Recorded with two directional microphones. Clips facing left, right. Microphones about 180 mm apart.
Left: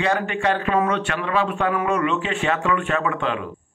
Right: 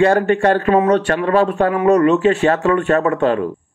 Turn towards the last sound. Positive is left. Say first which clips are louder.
# right 8 dB
turn(degrees=-40)  # may be behind; listen again after turning